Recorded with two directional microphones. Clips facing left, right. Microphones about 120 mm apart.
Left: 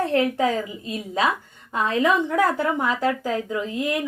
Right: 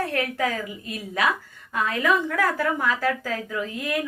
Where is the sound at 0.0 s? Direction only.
25° left (ahead or behind).